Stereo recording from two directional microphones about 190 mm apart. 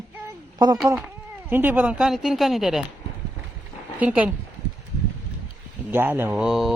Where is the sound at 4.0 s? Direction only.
5° right (ahead or behind).